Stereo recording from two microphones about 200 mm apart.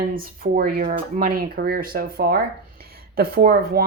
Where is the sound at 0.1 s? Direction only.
45° right (ahead or behind).